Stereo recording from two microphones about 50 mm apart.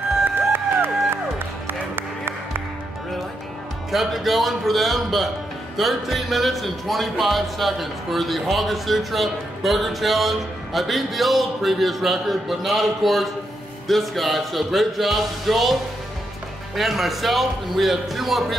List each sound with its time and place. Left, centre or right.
0.5 s music: right
3.9 s speech: centre